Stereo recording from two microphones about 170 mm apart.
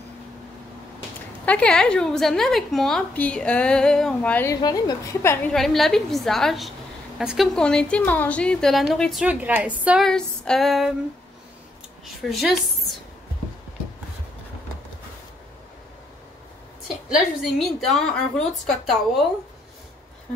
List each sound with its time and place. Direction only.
1.4 s a woman's voice: 5° left (ahead or behind)
4.6 s a woman's voice: 25° left (ahead or behind)
5.5 s a woman's voice: centre (ahead or behind)
9.2 s a woman's voice: 10° right (ahead or behind)
10.0 s a woman's voice: 5° left (ahead or behind)
12.3 s a woman's voice: centre (ahead or behind)
16.8 s a woman's voice: 5° right (ahead or behind)